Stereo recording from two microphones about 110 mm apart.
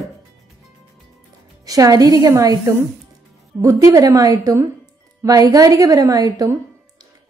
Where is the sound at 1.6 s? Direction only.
35° right (ahead or behind).